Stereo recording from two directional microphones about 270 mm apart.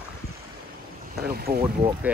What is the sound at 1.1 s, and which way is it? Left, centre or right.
Speech, right.